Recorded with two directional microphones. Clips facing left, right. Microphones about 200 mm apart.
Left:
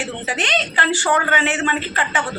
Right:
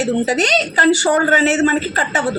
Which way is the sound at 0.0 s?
40° right (ahead or behind).